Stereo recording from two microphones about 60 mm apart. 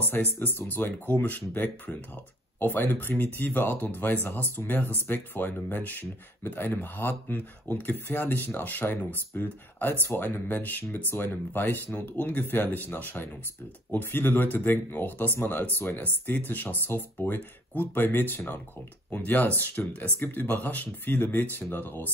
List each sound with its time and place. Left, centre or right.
0.1 s speech: left